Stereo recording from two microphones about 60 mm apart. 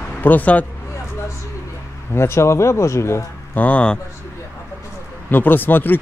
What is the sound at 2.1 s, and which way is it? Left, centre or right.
Speech, left.